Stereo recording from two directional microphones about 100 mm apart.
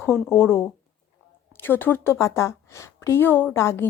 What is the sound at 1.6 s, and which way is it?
A woman's voice, 20° left (ahead or behind).